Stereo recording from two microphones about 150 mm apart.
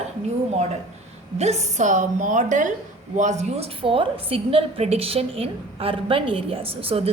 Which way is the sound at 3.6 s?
35° right (ahead or behind).